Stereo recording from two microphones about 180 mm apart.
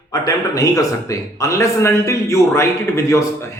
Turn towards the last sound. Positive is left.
turn(degrees=15)  # may be behind; listen again after turning